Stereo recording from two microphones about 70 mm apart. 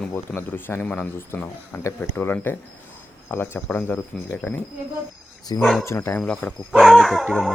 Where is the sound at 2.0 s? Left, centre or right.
Left.